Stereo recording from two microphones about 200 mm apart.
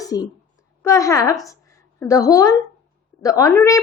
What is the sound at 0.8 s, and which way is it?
A woman's voice, 15° left (ahead or behind).